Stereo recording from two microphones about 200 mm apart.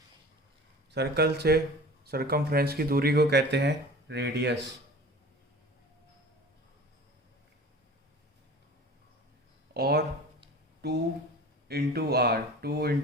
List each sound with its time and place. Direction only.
0.9 s speech: 55° right (ahead or behind)
9.7 s speech: 50° right (ahead or behind)
10.8 s a sound: 55° right (ahead or behind)
11.7 s speech: 55° right (ahead or behind)